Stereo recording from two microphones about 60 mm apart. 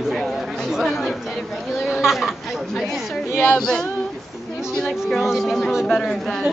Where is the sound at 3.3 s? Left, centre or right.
Left.